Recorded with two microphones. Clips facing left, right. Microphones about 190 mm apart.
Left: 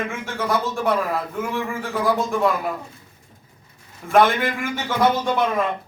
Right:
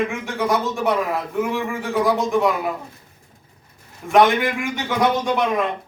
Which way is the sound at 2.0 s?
15° right (ahead or behind).